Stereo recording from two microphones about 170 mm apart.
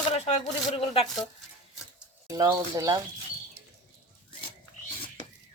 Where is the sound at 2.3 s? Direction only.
20° right (ahead or behind).